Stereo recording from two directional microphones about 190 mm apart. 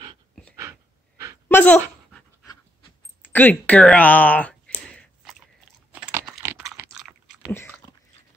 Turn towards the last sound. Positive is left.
turn(degrees=-5)  # may be behind; listen again after turning